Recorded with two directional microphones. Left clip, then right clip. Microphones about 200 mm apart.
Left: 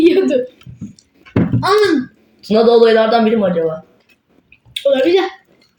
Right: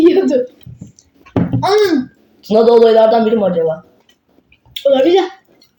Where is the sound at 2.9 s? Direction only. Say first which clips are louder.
Right 3 dB; 20° left (ahead or behind).